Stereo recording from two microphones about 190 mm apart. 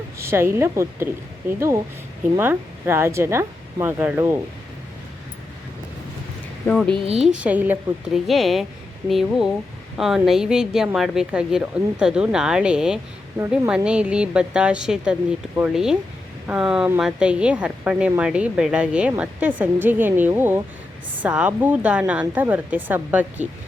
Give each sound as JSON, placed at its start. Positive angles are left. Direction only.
{"t": 0.2, "sound": "speech", "side_deg": -15}
{"t": 6.7, "sound": "speech", "side_deg": 5}
{"t": 7.2, "sound": "speech", "side_deg": -5}